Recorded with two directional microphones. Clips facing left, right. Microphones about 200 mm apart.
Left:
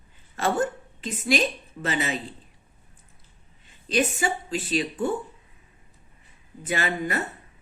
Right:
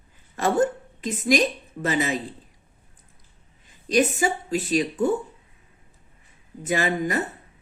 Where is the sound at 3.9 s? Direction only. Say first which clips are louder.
Right 4 dB; 45° right (ahead or behind).